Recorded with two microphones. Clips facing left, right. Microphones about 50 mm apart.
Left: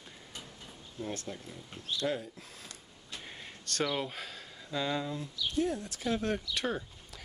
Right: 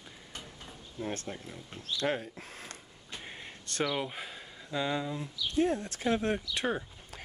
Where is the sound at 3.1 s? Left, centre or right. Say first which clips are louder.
Right 2 dB; centre.